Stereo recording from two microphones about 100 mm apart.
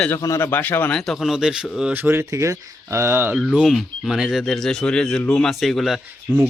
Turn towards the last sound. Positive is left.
turn(degrees=0)  # may be behind; listen again after turning